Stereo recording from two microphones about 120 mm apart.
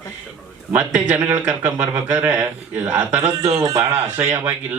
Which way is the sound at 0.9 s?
10° right (ahead or behind).